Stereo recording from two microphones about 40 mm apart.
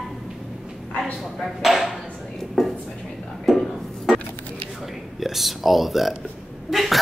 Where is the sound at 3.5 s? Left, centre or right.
Centre.